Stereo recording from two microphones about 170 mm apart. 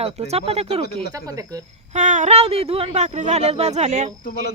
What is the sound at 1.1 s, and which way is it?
Speech, 20° right (ahead or behind).